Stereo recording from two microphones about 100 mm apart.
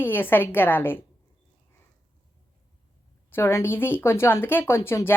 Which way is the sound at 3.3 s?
25° left (ahead or behind).